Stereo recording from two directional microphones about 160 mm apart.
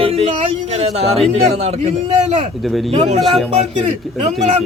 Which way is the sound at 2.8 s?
40° right (ahead or behind).